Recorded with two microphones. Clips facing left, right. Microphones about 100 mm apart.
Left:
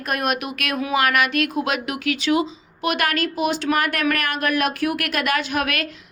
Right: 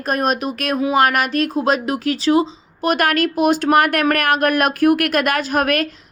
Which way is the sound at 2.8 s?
45° right (ahead or behind).